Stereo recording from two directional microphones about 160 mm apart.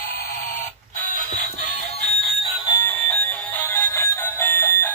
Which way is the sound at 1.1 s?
45° left (ahead or behind).